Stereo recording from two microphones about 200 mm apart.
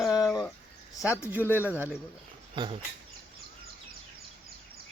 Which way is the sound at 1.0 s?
15° left (ahead or behind).